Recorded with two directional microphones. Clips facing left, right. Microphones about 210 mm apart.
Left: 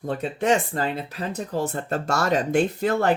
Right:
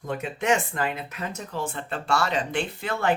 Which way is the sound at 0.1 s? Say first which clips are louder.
Left 3 dB; 35° left (ahead or behind).